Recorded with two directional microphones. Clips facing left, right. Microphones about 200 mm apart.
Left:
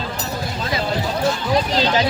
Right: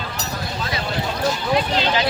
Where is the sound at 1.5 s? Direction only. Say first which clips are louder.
Left 2 dB; 35° left (ahead or behind).